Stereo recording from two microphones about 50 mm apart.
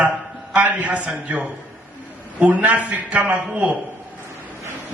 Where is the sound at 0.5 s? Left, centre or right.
Right.